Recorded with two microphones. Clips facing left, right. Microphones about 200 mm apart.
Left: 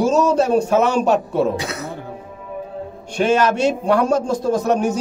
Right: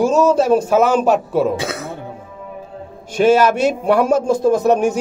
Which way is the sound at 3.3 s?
5° right (ahead or behind).